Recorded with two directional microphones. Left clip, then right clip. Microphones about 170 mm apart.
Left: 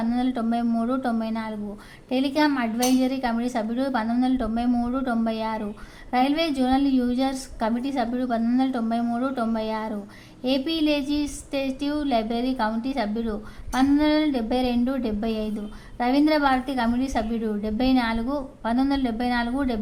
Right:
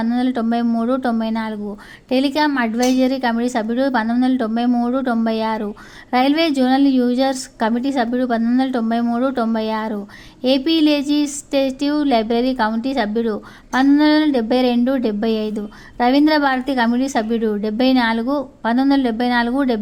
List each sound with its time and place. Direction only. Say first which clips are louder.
0.0 s speech: right 6 dB; 30° right (ahead or behind)